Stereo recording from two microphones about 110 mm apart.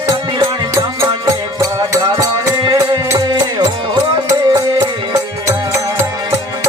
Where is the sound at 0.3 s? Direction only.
45° right (ahead or behind).